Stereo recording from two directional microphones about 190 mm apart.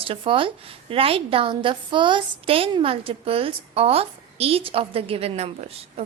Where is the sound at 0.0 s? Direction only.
30° right (ahead or behind).